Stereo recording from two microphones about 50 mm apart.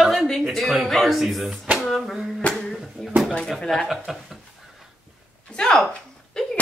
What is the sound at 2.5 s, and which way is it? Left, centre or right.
Speech, centre.